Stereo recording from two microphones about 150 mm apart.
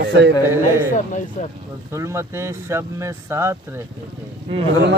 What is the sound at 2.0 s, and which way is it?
Speech, 20° right (ahead or behind).